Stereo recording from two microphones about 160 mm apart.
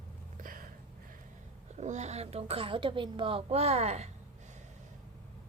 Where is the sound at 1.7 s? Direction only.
45° right (ahead or behind).